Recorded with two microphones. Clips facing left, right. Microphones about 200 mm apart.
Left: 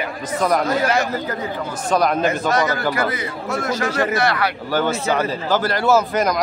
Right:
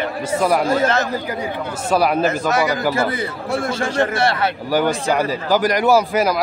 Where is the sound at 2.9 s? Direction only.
30° right (ahead or behind).